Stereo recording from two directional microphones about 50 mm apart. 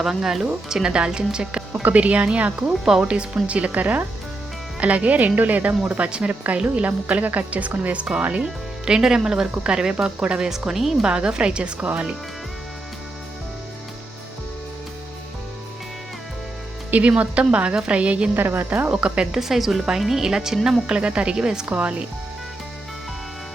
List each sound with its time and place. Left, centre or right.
0.0 s speech: centre
1.7 s a woman's voice: right
8.4 s speech: centre
10.7 s speech: centre
11.0 s speech: centre
16.9 s speech: right
18.3 s speech: right
18.9 s speech: right
19.4 s a woman's voice: centre
21.7 s speech: right